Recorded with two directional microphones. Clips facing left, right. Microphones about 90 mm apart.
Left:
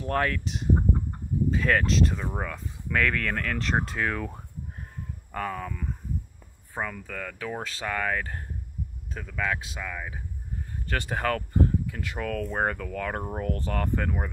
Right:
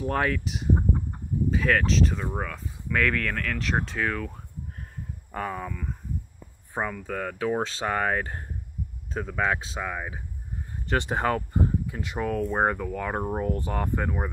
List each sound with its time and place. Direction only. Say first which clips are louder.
0.0 s speech: right 1 dB; 10° right (ahead or behind)
5.3 s speech: even; 10° right (ahead or behind)
6.7 s speech: right 3 dB; 15° right (ahead or behind)